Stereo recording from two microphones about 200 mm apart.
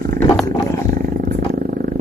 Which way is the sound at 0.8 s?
45° right (ahead or behind).